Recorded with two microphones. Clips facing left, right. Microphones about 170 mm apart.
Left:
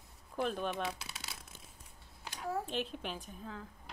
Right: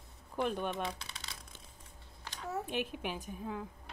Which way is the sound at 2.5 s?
15° right (ahead or behind).